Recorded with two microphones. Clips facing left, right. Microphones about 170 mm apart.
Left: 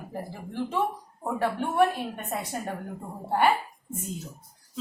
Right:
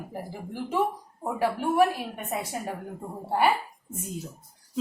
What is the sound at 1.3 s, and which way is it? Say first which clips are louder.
A woman's voice: right 1 dB; 5° right (ahead or behind).